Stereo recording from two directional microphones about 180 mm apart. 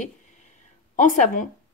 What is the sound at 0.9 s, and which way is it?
Speech, 45° left (ahead or behind).